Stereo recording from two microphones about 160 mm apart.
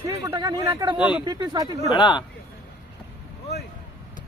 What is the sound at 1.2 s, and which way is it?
Speech, 25° right (ahead or behind).